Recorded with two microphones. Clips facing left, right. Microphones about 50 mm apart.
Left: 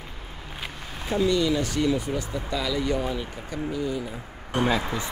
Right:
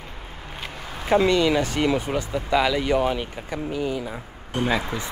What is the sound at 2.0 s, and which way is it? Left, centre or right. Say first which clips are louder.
Speech: right 3 dB; right.